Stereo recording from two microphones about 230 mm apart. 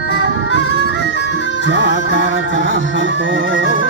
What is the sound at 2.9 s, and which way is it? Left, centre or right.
Music, right.